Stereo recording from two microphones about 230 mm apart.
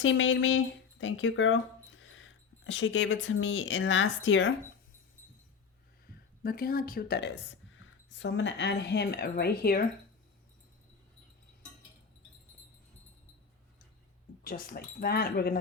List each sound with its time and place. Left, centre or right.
0.0 s speech: left
6.4 s speech: left
14.4 s speech: left